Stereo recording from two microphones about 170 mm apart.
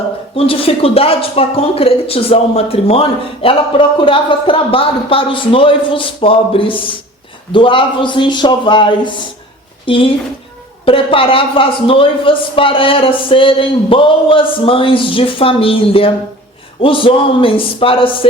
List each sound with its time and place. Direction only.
0.3 s a man's voice: 35° left (ahead or behind)